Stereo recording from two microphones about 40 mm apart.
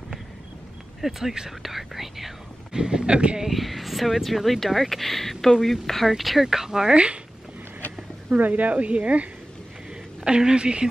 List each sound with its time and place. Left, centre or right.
1.0 s speech: centre
2.7 s a woman's voice: centre
3.4 s speech: centre
8.4 s a woman's voice: right
10.2 s a woman's voice: right